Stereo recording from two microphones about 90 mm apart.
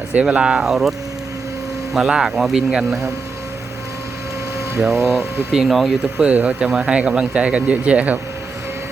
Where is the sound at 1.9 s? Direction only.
5° right (ahead or behind).